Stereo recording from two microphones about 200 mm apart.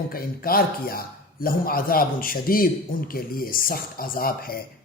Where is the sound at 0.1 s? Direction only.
45° left (ahead or behind).